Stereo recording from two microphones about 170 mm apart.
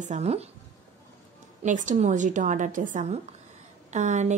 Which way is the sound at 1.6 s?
45° right (ahead or behind).